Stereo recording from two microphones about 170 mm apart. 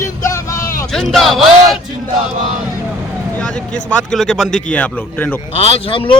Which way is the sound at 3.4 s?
5° left (ahead or behind).